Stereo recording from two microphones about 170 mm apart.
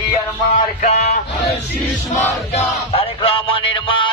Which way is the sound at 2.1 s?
40° left (ahead or behind).